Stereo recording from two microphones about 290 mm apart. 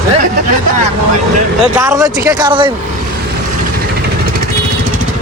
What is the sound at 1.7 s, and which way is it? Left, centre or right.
Speech, centre.